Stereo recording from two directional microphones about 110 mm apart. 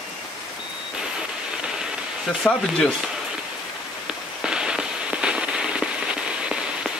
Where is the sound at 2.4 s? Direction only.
15° left (ahead or behind).